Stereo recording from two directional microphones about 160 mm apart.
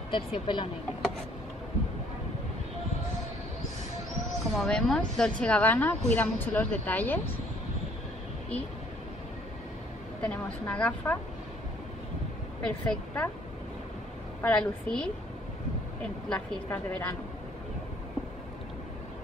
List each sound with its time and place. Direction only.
0.1 s speech: 30° left (ahead or behind)
4.6 s speech: 5° left (ahead or behind)
10.2 s speech: 10° left (ahead or behind)
12.6 s speech: 5° left (ahead or behind)
14.4 s a woman's voice: 5° left (ahead or behind)
16.3 s speech: 5° left (ahead or behind)